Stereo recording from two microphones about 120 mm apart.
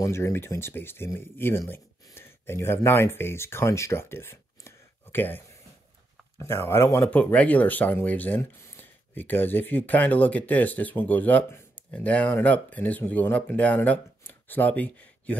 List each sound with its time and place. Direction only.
0.0 s speech: 20° left (ahead or behind)